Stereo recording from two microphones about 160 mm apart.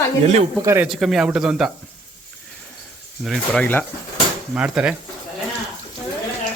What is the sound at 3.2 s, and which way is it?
Speech, 5° left (ahead or behind).